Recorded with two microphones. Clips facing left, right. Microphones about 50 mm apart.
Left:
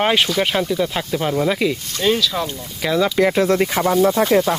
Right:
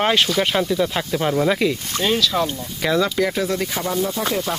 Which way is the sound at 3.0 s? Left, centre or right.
Centre.